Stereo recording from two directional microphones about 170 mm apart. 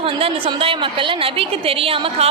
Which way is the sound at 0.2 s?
30° right (ahead or behind).